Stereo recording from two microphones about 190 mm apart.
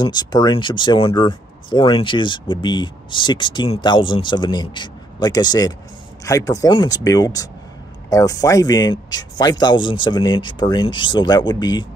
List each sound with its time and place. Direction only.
0.0 s speech: 20° left (ahead or behind)